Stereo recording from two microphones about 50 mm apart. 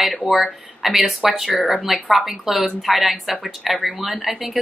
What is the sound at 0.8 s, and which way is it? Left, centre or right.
A woman's voice, centre.